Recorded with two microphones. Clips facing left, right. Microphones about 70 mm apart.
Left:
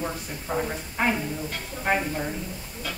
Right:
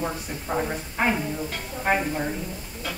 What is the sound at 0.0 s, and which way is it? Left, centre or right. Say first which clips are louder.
Speech: right 2 dB; centre.